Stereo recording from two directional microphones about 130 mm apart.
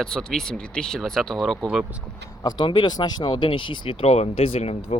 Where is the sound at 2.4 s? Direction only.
40° left (ahead or behind).